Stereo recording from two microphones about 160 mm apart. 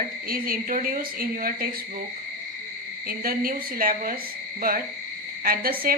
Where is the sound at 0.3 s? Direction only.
65° right (ahead or behind).